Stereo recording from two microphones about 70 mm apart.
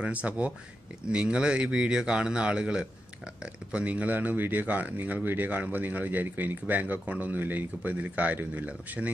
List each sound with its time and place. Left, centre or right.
0.0 s speech: centre